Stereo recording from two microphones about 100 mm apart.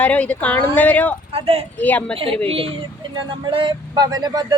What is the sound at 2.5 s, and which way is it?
Speech, 70° right (ahead or behind).